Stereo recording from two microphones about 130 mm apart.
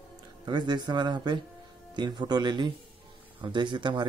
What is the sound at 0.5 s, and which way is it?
Speech, 35° right (ahead or behind).